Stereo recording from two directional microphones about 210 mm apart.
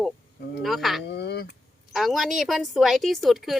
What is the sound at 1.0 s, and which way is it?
Speech, 50° left (ahead or behind).